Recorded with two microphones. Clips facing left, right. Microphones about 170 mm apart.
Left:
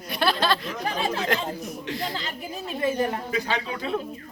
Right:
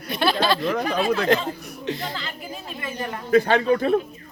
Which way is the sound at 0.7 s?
65° right (ahead or behind).